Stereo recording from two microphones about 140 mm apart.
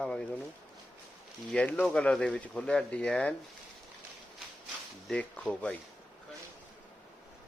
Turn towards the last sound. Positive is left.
turn(degrees=5)  # may be behind; listen again after turning